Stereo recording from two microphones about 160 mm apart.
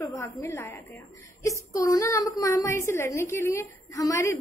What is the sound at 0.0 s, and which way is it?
A woman's voice, 20° left (ahead or behind).